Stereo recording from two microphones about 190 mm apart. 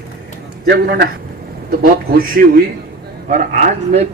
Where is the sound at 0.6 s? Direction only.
60° right (ahead or behind).